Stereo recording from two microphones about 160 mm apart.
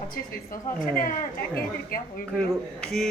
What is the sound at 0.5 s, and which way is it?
Speech, 60° left (ahead or behind).